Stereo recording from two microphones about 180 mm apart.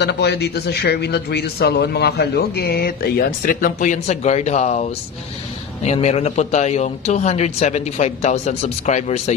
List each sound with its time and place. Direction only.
0.0 s a man's voice: 70° left (ahead or behind); by 4.8 s 35° left (ahead or behind)
5.9 s speech: 35° left (ahead or behind)